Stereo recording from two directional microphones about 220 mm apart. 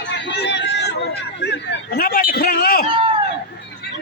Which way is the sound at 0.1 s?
55° left (ahead or behind).